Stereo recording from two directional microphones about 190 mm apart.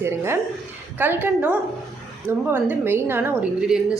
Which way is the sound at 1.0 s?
10° right (ahead or behind).